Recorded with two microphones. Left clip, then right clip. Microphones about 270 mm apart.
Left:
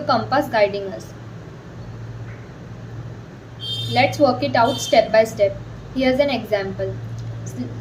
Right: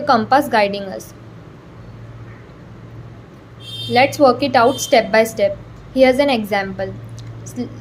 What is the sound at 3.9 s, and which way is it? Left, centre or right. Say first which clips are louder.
A woman's voice: right 4 dB; right.